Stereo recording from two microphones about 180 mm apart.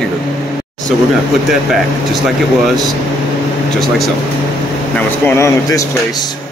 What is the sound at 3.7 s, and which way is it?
Speech, centre (ahead or behind).